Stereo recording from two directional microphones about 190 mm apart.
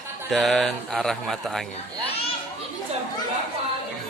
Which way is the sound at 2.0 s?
30° left (ahead or behind).